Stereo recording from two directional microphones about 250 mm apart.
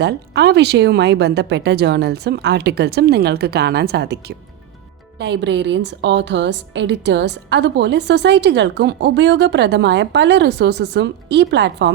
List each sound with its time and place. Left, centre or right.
0.0 s a woman's voice: right